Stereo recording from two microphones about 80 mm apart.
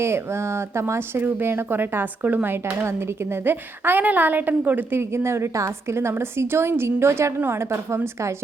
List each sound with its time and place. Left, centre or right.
0.0 s a woman's voice: right